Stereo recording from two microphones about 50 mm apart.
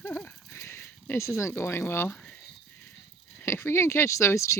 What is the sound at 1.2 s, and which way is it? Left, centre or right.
Speech, left.